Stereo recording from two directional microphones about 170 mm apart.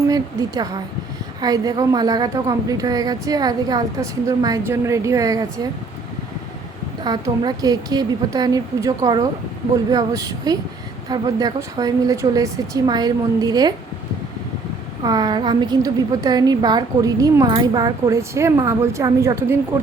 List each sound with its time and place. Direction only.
0.1 s a woman's voice: 20° right (ahead or behind)
7.0 s a woman's voice: 25° right (ahead or behind)
15.0 s a woman's voice: 25° right (ahead or behind)